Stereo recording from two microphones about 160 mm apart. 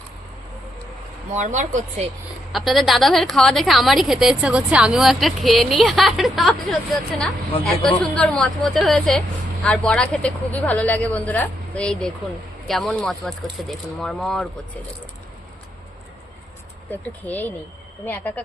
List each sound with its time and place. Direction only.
1.3 s speech: 50° right (ahead or behind)
2.5 s a woman's voice: centre (ahead or behind)
16.9 s speech: 10° left (ahead or behind)